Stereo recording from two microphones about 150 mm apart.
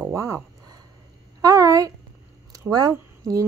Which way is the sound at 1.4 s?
20° right (ahead or behind).